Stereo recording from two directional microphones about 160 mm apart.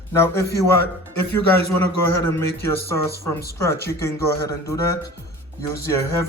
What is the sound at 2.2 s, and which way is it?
Speech, 15° left (ahead or behind).